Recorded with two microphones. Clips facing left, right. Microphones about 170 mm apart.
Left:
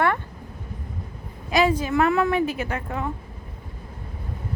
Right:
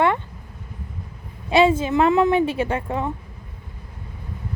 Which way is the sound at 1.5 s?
25° right (ahead or behind).